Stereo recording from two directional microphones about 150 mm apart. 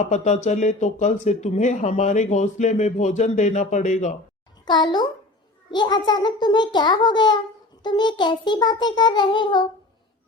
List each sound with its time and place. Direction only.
0.0 s speech: 50° left (ahead or behind)
4.6 s a child's voice: 30° left (ahead or behind)